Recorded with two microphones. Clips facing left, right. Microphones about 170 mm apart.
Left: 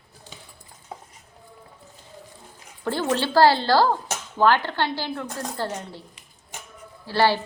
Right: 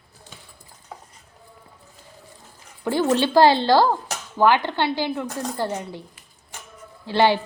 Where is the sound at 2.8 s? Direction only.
15° right (ahead or behind).